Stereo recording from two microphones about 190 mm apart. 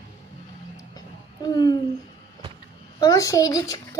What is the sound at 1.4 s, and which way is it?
Speech, 20° left (ahead or behind).